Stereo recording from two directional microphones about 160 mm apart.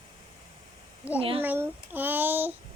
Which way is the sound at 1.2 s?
35° right (ahead or behind).